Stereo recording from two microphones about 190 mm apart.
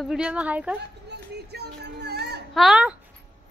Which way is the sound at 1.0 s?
60° right (ahead or behind).